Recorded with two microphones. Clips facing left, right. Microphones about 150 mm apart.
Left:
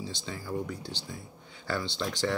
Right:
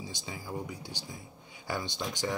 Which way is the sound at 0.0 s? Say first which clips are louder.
Left 3 dB; 15° right (ahead or behind).